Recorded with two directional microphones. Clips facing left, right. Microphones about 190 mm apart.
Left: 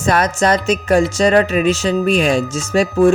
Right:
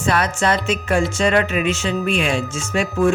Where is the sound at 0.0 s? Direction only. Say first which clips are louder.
Left 4 dB; 40° left (ahead or behind).